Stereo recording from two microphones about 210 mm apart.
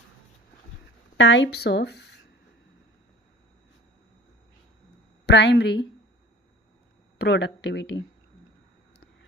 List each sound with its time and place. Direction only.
1.1 s speech: 60° left (ahead or behind)
5.2 s a woman's voice: 55° left (ahead or behind)
7.2 s speech: 55° left (ahead or behind)